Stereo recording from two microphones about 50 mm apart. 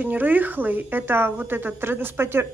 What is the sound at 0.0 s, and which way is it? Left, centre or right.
A woman's voice, right.